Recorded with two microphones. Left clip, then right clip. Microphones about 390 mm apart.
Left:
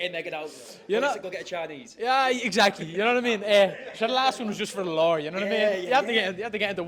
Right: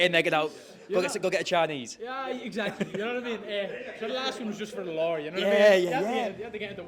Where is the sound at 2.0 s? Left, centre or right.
Left.